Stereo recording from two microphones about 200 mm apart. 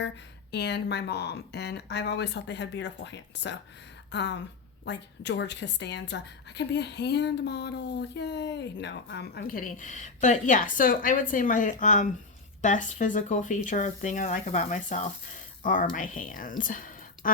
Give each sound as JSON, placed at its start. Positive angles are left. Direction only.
{"t": 0.5, "sound": "a woman's voice", "side_deg": 60}